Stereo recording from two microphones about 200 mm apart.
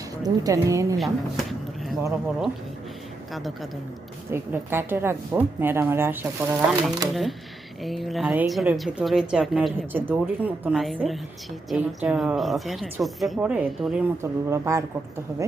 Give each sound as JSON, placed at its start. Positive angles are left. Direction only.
{"t": 0.2, "sound": "a woman's voice", "side_deg": -15}
{"t": 0.9, "sound": "a woman's voice", "side_deg": 0}
{"t": 3.3, "sound": "a woman's voice", "side_deg": 0}
{"t": 4.3, "sound": "a woman's voice", "side_deg": -10}